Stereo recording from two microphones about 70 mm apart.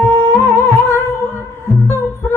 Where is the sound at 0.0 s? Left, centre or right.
Left.